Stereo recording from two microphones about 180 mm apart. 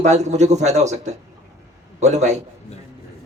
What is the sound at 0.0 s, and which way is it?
A man's voice, 40° right (ahead or behind).